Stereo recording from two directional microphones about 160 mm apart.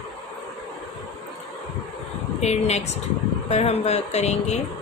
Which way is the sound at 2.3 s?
45° left (ahead or behind).